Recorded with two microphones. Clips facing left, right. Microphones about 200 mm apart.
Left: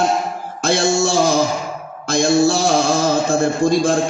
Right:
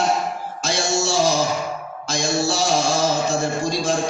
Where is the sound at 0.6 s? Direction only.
55° left (ahead or behind).